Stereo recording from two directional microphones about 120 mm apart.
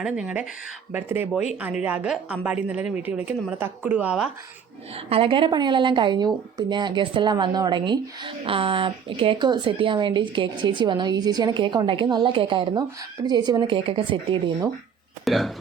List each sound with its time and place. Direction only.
0.0 s a woman's voice: 10° right (ahead or behind)
5.0 s a woman's voice: 50° right (ahead or behind)
15.2 s speech: centre (ahead or behind)